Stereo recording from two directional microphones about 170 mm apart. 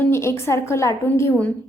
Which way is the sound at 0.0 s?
15° left (ahead or behind).